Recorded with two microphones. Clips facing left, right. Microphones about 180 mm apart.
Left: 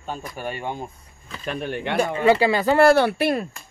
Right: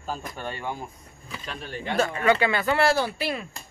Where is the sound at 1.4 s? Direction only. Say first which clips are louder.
Left 8 dB; 60° left (ahead or behind).